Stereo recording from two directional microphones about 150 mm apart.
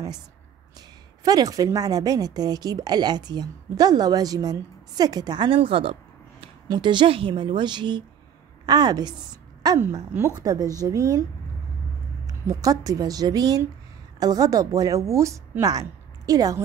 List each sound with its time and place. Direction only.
0.7 s a woman's voice: 25° right (ahead or behind)
12.3 s a woman's voice: 25° right (ahead or behind)